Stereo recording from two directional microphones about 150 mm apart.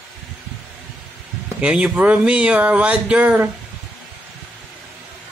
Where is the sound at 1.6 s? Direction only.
5° right (ahead or behind).